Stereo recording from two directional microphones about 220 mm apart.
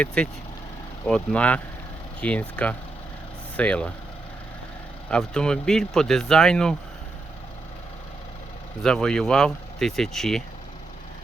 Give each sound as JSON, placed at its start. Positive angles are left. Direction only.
{"t": 0.0, "sound": "speech", "side_deg": 5}
{"t": 5.1, "sound": "speech", "side_deg": 5}
{"t": 8.8, "sound": "speech", "side_deg": 5}